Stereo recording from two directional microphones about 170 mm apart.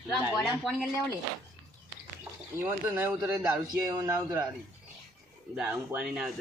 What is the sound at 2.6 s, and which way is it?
A man's voice, 10° right (ahead or behind).